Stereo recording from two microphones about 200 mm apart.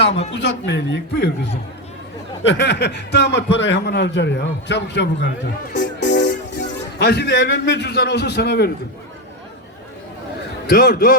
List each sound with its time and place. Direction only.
0.3 s a man's voice: 60° left (ahead or behind)
2.5 s a man's voice: 60° left (ahead or behind)
10.7 s speech: 50° left (ahead or behind)